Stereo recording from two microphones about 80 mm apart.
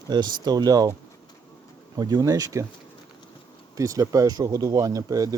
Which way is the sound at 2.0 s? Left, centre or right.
Right.